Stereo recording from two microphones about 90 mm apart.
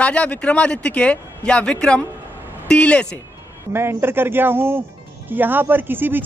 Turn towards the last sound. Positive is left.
turn(degrees=-20)  # may be behind; listen again after turning